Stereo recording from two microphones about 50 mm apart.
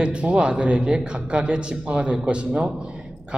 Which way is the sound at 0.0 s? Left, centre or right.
Right.